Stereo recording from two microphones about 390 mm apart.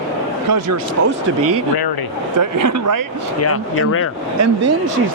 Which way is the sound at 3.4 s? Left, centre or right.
Left.